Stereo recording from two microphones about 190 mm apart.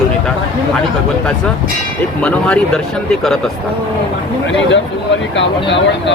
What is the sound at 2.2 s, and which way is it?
Speech, 5° left (ahead or behind).